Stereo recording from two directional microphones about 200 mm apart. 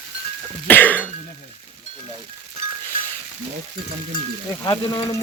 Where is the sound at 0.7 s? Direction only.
10° left (ahead or behind).